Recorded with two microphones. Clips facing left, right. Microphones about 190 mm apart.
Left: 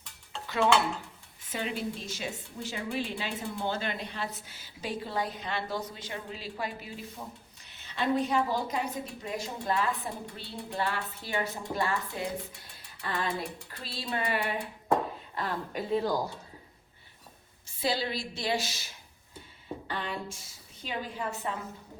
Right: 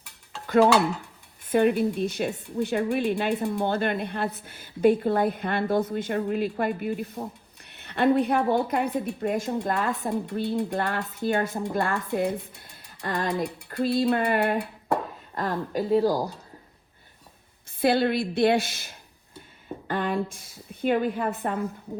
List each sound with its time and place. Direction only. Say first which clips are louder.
1.5 s a woman's voice: right 13 dB; 55° right (ahead or behind)
13.1 s speech: right 6 dB; 40° right (ahead or behind)
13.7 s a woman's voice: right 15 dB; 50° right (ahead or behind)
15.4 s speech: right 7 dB; 40° right (ahead or behind)
17.7 s a woman's voice: right 9 dB; 55° right (ahead or behind)
19.9 s a sound: right 9 dB; 50° right (ahead or behind)
20.3 s a woman's voice: right 8 dB; 55° right (ahead or behind)